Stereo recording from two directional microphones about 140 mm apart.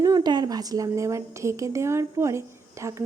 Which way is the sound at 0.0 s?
30° right (ahead or behind).